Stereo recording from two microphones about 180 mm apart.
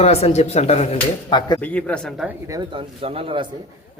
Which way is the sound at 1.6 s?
10° left (ahead or behind).